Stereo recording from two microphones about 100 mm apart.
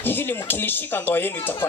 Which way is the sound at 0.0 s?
20° left (ahead or behind).